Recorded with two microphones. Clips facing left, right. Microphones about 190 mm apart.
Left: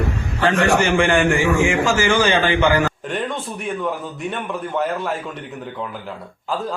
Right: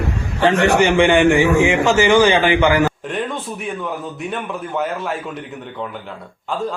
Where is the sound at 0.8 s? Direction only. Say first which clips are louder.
Right 4 dB; 20° right (ahead or behind).